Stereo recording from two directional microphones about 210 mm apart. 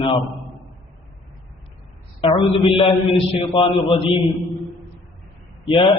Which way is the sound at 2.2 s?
25° left (ahead or behind).